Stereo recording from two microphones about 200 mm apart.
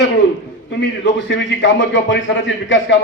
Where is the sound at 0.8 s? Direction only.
65° left (ahead or behind).